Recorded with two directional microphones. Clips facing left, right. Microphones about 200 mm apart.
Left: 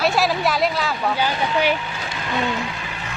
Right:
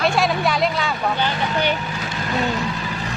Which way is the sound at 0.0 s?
Centre (ahead or behind).